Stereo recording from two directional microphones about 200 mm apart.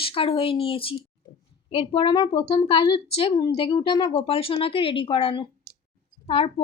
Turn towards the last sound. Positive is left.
turn(degrees=30)  # may be behind; listen again after turning